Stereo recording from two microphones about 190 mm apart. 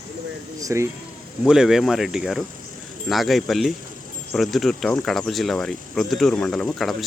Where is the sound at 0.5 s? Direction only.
15° right (ahead or behind).